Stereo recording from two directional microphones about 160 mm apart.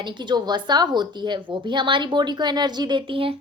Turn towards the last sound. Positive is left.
turn(degrees=-35)  # may be behind; listen again after turning